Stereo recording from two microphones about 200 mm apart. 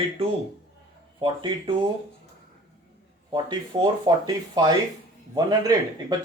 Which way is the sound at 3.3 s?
20° right (ahead or behind).